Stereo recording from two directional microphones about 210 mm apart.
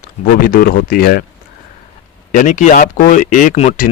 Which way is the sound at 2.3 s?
35° left (ahead or behind).